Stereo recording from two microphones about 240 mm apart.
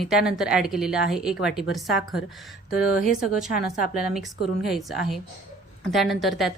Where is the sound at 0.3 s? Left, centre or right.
Centre.